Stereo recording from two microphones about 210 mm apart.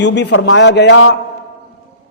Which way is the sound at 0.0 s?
55° left (ahead or behind).